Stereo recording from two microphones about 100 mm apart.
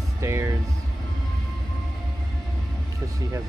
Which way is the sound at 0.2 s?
25° right (ahead or behind).